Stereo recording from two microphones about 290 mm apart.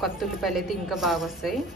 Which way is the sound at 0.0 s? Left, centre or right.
Centre.